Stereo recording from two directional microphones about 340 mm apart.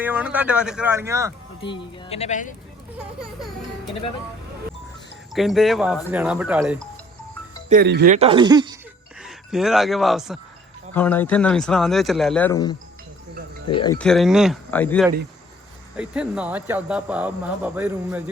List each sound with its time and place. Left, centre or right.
0.0 s speech: centre
1.6 s speech: centre
3.0 s speech: centre
5.3 s speech: centre
7.7 s speech: right; by 8.8 s centre
9.2 s speech: centre